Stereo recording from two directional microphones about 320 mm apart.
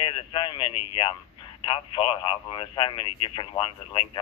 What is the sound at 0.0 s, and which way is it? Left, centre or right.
Speech, centre.